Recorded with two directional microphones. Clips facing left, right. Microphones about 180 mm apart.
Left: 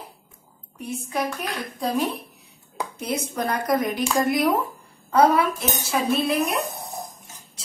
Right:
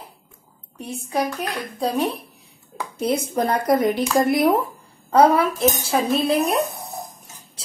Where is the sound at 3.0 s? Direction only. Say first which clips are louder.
Right 6 dB; 30° right (ahead or behind).